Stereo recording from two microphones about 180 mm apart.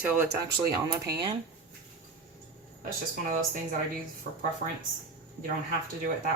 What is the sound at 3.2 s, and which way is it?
Speech, 50° right (ahead or behind).